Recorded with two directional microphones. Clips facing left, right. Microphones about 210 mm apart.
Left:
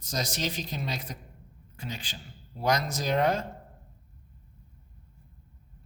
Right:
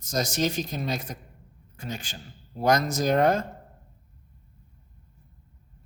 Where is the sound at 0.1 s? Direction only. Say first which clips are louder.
Right 6 dB; 45° right (ahead or behind).